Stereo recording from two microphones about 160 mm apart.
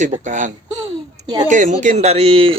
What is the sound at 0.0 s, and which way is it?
Speech, 50° right (ahead or behind).